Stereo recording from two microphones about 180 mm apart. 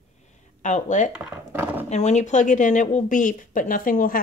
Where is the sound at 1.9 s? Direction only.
40° left (ahead or behind).